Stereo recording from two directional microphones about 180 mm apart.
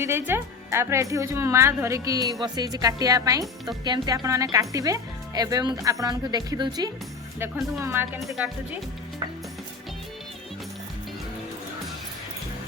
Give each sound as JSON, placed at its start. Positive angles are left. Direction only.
{"t": 0.0, "sound": "a woman's voice", "side_deg": -15}
{"t": 8.3, "sound": "speech", "side_deg": -5}